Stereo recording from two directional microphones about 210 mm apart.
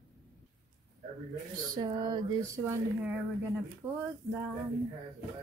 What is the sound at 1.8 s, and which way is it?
Speech, 20° right (ahead or behind).